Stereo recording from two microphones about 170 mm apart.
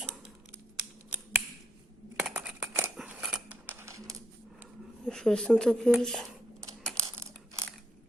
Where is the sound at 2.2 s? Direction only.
5° right (ahead or behind).